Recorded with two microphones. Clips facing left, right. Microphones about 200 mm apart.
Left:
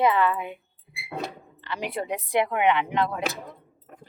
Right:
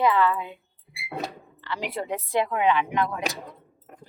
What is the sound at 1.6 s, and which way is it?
A woman's voice, 20° left (ahead or behind).